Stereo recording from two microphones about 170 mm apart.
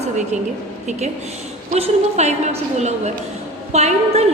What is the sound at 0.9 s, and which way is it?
A woman's voice, 45° right (ahead or behind).